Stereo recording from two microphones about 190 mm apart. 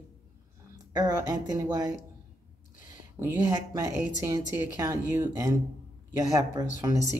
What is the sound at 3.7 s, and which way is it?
Speech, 15° right (ahead or behind).